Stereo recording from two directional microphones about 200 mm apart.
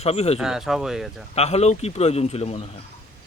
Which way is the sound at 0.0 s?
30° left (ahead or behind).